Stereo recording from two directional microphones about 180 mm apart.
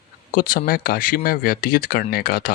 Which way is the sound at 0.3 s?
50° left (ahead or behind).